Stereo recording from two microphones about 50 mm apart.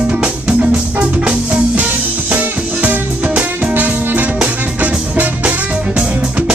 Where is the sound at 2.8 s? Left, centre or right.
Right.